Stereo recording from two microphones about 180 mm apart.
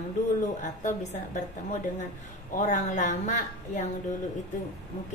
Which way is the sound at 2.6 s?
40° left (ahead or behind).